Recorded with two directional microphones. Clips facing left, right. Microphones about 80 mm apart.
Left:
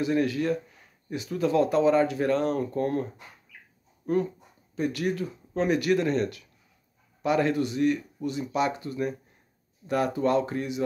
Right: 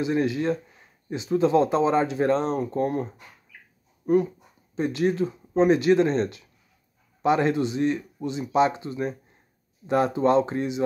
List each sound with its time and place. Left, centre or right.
0.0 s speech: right
4.7 s speech: right